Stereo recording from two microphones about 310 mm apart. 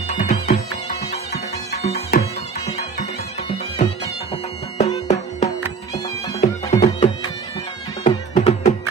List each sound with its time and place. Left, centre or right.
0.1 s music: left
4.7 s music: centre